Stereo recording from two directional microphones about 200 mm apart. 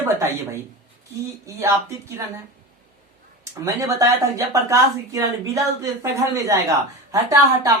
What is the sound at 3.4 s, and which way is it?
Speech, 15° right (ahead or behind).